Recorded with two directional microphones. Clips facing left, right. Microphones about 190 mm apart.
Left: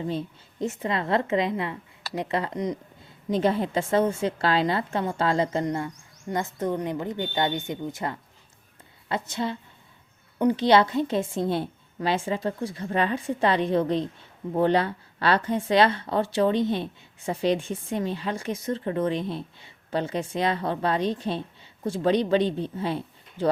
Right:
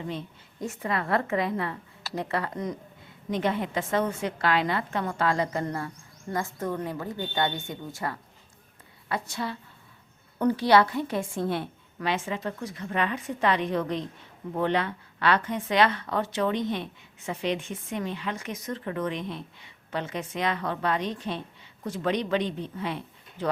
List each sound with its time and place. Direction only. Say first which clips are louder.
0.0 s a woman's voice: left 5 dB; 30° left (ahead or behind)
3.2 s a woman's voice: left 4 dB; 30° left (ahead or behind); by 10.7 s 10° left (ahead or behind)
10.7 s a woman's voice: left 1 dB; 25° left (ahead or behind)